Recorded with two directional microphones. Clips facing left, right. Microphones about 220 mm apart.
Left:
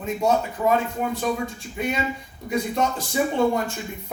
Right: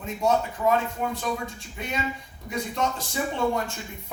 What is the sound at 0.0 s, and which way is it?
Speech, 10° left (ahead or behind).